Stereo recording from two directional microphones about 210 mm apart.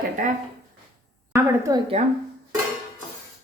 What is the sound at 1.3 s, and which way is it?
Speech, 15° right (ahead or behind).